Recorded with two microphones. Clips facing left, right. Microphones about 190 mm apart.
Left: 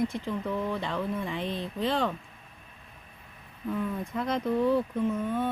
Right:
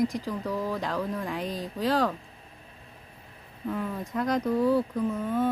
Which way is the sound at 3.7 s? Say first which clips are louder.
Even; centre (ahead or behind).